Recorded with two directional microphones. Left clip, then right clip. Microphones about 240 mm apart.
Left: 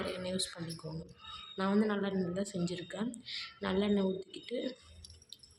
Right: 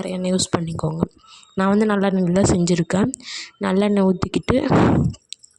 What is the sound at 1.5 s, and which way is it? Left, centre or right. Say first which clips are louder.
Speech: right 14 dB; right.